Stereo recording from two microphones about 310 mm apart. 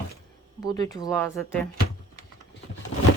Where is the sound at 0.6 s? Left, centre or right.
Centre.